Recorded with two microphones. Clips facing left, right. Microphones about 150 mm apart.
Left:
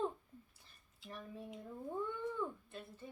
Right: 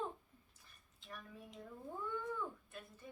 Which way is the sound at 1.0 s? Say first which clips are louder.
Left 4 dB; 30° left (ahead or behind).